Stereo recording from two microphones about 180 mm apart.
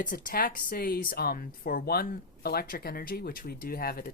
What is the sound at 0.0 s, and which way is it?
Speech, 50° left (ahead or behind).